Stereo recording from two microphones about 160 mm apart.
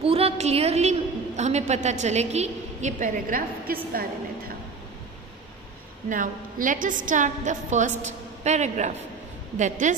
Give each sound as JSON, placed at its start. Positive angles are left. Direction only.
{"t": 0.0, "sound": "a woman's voice", "side_deg": -35}
{"t": 6.0, "sound": "a woman's voice", "side_deg": -55}